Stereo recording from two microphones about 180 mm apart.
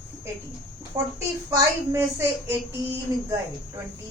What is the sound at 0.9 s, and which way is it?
A woman's voice, 15° right (ahead or behind).